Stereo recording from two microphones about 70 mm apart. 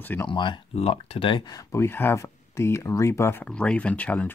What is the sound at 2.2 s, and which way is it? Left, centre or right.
Speech, left.